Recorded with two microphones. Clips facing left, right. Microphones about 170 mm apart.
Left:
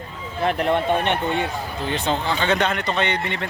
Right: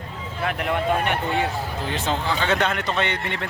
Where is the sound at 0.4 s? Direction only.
30° left (ahead or behind).